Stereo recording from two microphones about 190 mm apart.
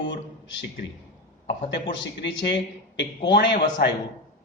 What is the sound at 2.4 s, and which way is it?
A man's voice, 65° left (ahead or behind).